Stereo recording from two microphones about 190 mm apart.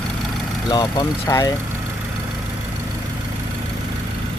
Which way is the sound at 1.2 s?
15° left (ahead or behind).